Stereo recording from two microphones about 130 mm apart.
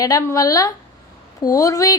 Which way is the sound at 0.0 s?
25° left (ahead or behind).